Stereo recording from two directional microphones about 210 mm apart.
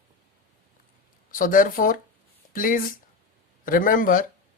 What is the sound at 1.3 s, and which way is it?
Speech, 40° left (ahead or behind).